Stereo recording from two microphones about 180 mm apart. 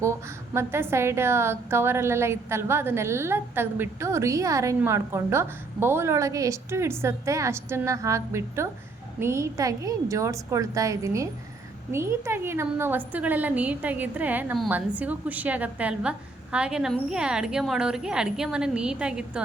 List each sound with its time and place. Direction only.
0.0 s a woman's voice: 15° right (ahead or behind)